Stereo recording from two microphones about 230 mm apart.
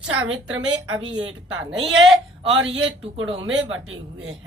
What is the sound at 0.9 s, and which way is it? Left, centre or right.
Speech, centre.